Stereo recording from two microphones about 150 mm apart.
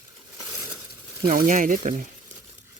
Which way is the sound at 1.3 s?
60° right (ahead or behind).